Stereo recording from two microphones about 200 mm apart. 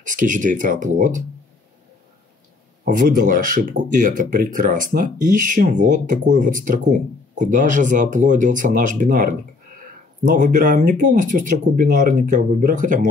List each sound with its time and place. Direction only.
0.0 s speech: 40° right (ahead or behind)
2.8 s speech: 40° right (ahead or behind)